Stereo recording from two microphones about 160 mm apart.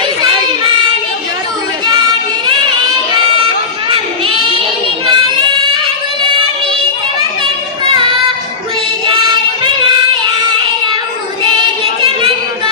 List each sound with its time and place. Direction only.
3.8 s a sound: 30° right (ahead or behind)
5.0 s child singing: 30° right (ahead or behind)
7.9 s child singing: 30° right (ahead or behind)